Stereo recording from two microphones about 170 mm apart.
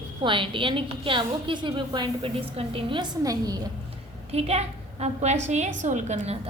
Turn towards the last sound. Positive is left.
turn(degrees=-40)  # may be behind; listen again after turning